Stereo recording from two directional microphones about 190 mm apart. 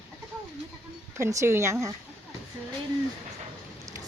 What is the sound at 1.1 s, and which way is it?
Speech, 15° right (ahead or behind).